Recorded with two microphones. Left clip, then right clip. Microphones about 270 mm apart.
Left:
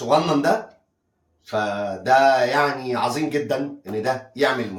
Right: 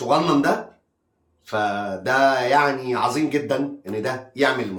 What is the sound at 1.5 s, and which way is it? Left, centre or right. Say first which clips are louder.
Speech: right 1 dB; centre.